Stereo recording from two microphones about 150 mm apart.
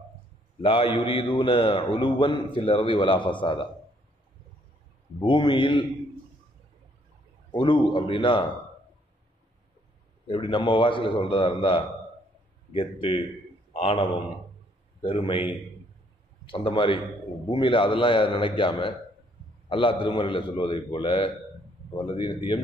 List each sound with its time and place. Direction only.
0.6 s a man's voice: 35° left (ahead or behind)
5.2 s a man's voice: 30° left (ahead or behind)
7.5 s a man's voice: 30° left (ahead or behind)
10.2 s a man's voice: 35° left (ahead or behind)
16.4 s a man's voice: 35° left (ahead or behind)